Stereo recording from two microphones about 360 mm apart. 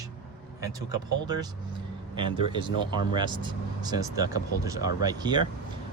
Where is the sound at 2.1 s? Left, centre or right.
Centre.